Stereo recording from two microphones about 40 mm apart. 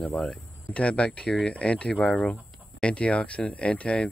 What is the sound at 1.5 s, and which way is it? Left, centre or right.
Speech, left.